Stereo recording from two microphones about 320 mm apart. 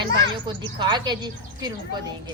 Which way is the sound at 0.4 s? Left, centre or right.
Centre.